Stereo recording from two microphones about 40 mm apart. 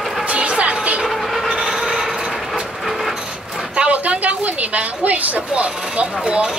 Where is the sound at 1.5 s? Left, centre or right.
Centre.